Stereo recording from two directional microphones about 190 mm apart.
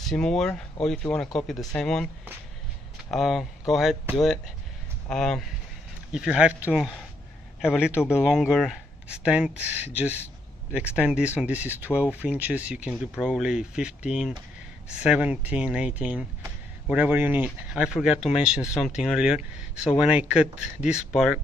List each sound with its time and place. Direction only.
0.0 s speech: centre (ahead or behind)
3.1 s speech: centre (ahead or behind)
5.0 s speech: 5° left (ahead or behind)
18.0 s speech: 35° left (ahead or behind)
18.4 s speech: 5° right (ahead or behind)